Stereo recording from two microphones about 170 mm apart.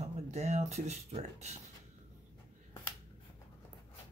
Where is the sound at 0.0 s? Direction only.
40° right (ahead or behind).